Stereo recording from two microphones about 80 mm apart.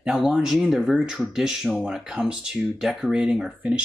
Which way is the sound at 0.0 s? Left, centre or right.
Centre.